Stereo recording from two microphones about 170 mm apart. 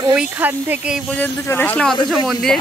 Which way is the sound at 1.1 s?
10° left (ahead or behind).